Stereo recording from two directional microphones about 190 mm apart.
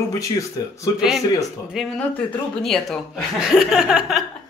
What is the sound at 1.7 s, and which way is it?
Speech, centre (ahead or behind).